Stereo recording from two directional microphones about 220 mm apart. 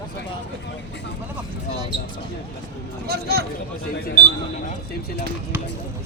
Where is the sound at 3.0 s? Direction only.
45° right (ahead or behind).